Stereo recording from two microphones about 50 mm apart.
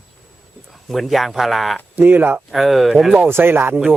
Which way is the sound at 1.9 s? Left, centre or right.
Right.